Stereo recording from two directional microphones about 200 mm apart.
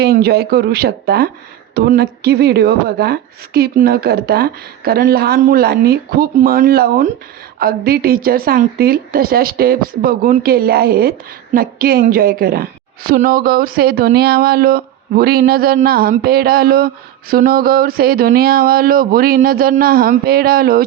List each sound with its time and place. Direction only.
0.0 s a woman's voice: 50° right (ahead or behind)